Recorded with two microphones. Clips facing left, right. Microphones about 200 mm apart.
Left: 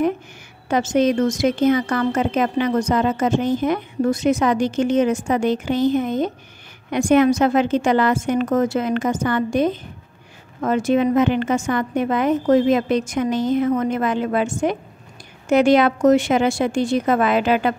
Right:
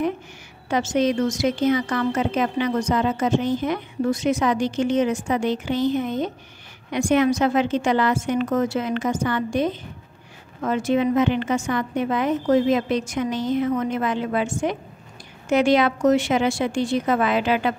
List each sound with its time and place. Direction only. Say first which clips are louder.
0.7 s speech: left 3 dB; 50° left (ahead or behind)